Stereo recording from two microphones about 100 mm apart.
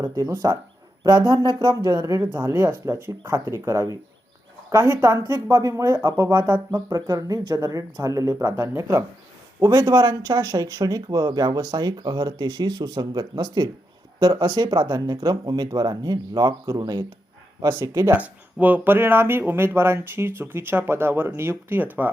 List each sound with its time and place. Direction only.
0.0 s speech: 30° right (ahead or behind)
1.2 s speech: 55° right (ahead or behind)
1.9 s speech: 35° right (ahead or behind)
18.6 s speech: 20° right (ahead or behind)